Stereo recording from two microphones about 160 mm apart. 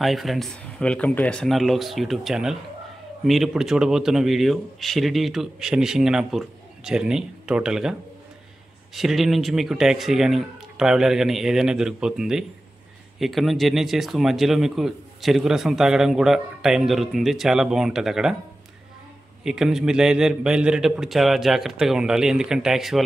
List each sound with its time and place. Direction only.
0.0 s speech: centre (ahead or behind)
8.9 s speech: centre (ahead or behind)
19.4 s speech: 5° right (ahead or behind)